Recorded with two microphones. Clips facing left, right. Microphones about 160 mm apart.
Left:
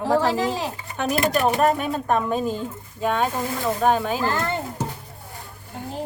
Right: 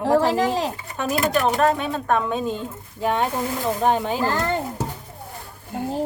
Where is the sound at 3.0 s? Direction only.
20° right (ahead or behind).